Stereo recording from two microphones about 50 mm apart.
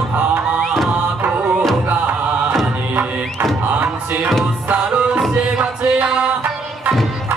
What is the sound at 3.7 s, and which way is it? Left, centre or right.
Music, right.